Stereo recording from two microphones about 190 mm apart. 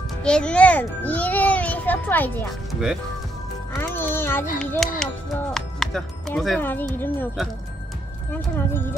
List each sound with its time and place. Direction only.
0.2 s a child's voice: 5° left (ahead or behind)
2.7 s speech: 5° right (ahead or behind)
3.7 s speech: 10° left (ahead or behind)
8.3 s a child's voice: 10° left (ahead or behind)